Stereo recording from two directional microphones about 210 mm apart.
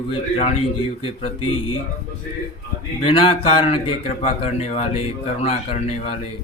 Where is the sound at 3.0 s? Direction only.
25° left (ahead or behind).